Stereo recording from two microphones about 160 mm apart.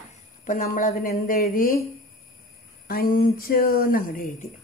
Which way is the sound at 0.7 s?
60° left (ahead or behind).